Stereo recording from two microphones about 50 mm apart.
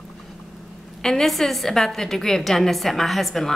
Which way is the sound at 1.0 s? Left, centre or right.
Centre.